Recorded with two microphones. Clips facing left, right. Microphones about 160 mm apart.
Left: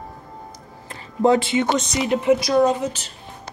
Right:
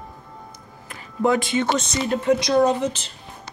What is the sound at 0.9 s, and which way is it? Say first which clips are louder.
Speech: left 3 dB; 30° left (ahead or behind).